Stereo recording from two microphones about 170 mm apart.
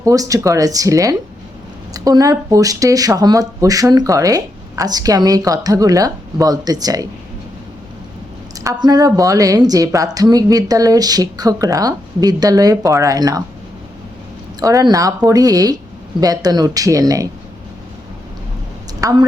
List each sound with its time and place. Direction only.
0.0 s speech: 20° right (ahead or behind)
8.5 s speech: 20° right (ahead or behind)
14.6 s speech: 20° right (ahead or behind)
18.9 s a woman's voice: 20° right (ahead or behind)